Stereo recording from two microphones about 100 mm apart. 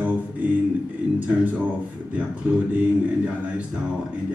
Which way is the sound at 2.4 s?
20° right (ahead or behind).